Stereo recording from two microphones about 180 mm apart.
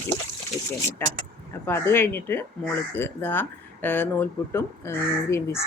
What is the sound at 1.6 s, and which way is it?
Speech, 15° left (ahead or behind).